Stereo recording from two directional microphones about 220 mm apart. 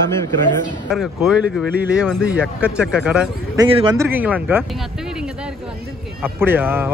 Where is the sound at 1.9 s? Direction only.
5° right (ahead or behind).